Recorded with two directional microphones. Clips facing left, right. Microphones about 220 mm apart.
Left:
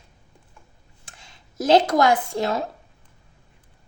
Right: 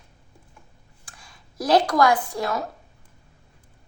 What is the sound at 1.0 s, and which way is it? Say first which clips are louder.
Speech: left 1 dB; 25° left (ahead or behind).